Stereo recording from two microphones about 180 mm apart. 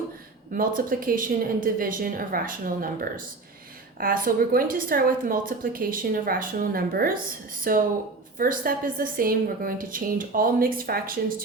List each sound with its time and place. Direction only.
0.5 s a woman's voice: 50° right (ahead or behind)